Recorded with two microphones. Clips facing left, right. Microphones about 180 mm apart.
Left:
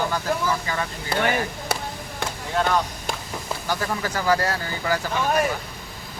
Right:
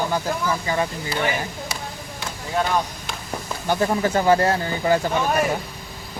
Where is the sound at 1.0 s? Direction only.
55° left (ahead or behind).